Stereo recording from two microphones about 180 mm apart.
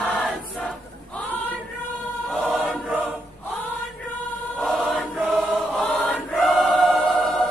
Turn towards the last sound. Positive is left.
turn(degrees=0)  # may be behind; listen again after turning